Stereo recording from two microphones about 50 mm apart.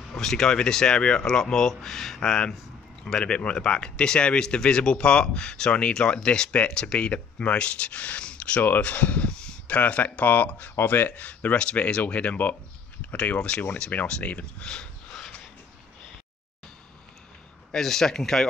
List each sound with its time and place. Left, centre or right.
0.1 s speech: centre
8.8 s a sound: left
9.8 s speech: left
17.6 s speech: centre